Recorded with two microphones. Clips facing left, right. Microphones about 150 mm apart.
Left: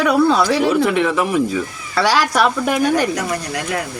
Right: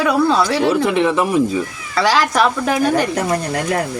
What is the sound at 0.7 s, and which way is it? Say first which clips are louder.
Speech: right 1 dB; 20° right (ahead or behind).